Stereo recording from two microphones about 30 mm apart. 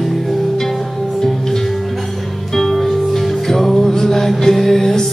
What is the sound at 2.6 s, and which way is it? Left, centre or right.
Music, centre.